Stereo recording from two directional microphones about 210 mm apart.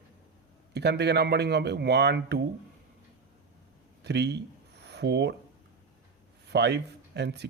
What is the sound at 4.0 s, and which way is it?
Speech, 55° right (ahead or behind).